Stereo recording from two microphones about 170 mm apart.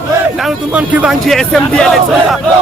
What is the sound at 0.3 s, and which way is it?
A man's voice, 5° right (ahead or behind).